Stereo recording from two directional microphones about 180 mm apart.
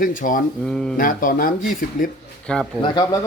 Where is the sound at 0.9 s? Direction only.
50° left (ahead or behind).